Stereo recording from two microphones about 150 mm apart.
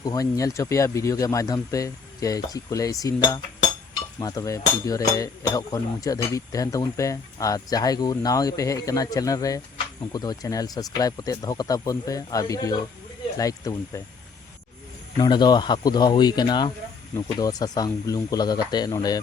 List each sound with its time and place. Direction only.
0.0 s speech: 25° left (ahead or behind)
15.2 s speech: 25° left (ahead or behind)